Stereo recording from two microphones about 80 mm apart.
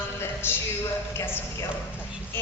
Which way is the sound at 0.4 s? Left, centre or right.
Left.